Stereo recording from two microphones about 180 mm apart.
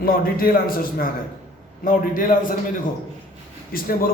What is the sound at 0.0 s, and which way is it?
A man's voice, 55° left (ahead or behind).